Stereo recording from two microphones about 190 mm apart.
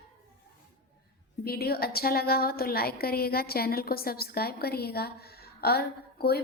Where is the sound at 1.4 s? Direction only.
55° left (ahead or behind).